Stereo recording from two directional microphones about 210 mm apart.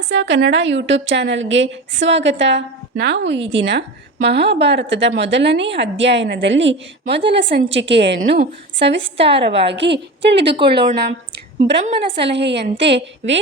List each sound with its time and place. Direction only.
0.1 s a woman's voice: 60° right (ahead or behind)